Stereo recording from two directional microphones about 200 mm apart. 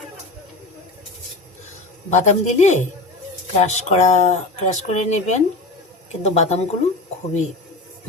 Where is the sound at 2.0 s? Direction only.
35° left (ahead or behind).